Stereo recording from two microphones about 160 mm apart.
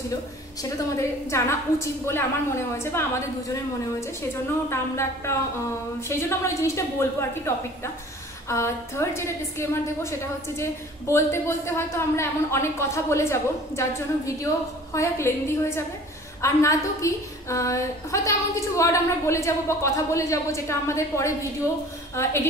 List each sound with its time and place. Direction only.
0.1 s a woman's voice: 20° left (ahead or behind)